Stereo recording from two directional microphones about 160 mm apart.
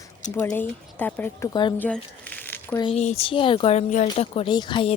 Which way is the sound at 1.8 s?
10° left (ahead or behind).